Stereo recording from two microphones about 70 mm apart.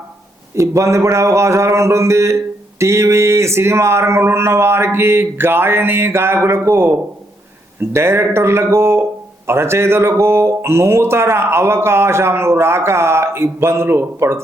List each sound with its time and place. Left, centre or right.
0.5 s speech: right